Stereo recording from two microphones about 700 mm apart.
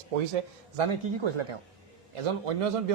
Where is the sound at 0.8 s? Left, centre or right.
Right.